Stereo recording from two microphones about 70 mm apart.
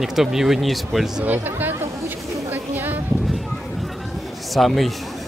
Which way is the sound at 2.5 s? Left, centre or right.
Right.